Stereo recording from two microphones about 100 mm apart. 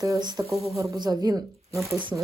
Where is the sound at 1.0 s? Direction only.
40° right (ahead or behind).